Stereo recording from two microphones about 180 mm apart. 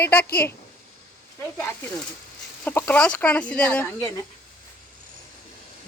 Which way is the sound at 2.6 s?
10° left (ahead or behind).